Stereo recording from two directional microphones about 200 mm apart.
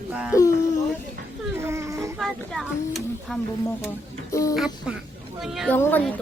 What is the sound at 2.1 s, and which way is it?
Speech, centre (ahead or behind).